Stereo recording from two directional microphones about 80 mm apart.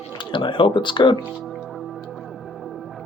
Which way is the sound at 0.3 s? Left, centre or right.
Left.